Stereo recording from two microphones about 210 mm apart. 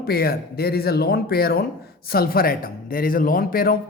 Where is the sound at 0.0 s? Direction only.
45° left (ahead or behind).